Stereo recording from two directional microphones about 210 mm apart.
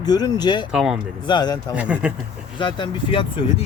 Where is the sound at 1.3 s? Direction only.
20° left (ahead or behind).